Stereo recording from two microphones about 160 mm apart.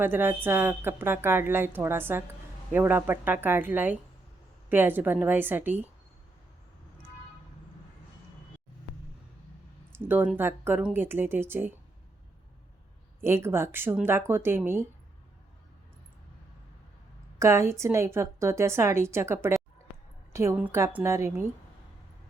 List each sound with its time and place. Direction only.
0.0 s a woman's voice: 10° right (ahead or behind)
10.0 s a woman's voice: 15° right (ahead or behind)
13.2 s a woman's voice: 15° right (ahead or behind)
17.4 s a woman's voice: 20° right (ahead or behind)